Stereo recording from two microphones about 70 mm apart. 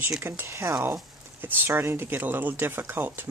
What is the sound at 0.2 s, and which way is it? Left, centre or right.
Speech, right.